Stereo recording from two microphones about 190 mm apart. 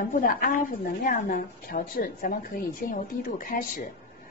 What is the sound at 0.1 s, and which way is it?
A woman's voice, 45° left (ahead or behind).